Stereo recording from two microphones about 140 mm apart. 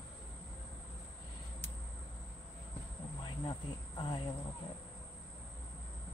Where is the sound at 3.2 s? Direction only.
35° left (ahead or behind).